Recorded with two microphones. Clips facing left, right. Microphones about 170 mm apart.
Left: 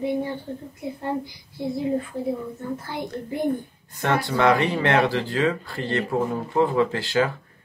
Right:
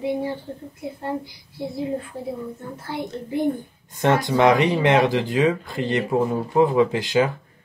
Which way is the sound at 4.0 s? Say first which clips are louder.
Right 4 dB; 20° right (ahead or behind).